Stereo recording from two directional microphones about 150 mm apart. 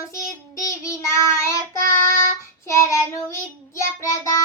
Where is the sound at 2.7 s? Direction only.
20° left (ahead or behind).